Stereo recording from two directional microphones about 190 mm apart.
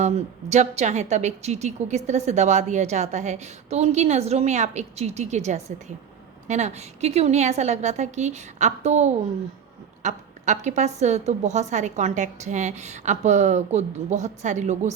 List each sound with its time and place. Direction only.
0.0 s a woman's voice: 35° right (ahead or behind)